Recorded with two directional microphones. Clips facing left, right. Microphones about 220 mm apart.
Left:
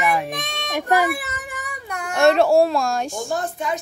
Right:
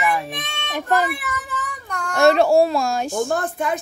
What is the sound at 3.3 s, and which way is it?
Speech, 55° right (ahead or behind).